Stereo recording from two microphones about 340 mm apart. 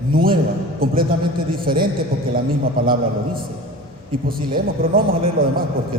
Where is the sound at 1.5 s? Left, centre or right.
Right.